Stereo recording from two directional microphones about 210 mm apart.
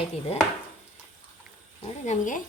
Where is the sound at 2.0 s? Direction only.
35° left (ahead or behind).